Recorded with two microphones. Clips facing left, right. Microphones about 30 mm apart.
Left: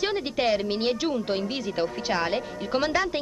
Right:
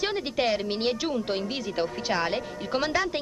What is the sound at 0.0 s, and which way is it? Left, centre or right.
A woman's voice, centre.